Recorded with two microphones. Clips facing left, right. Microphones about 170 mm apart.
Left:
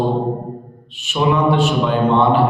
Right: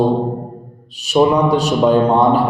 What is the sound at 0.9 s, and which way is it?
Mantra, 40° right (ahead or behind).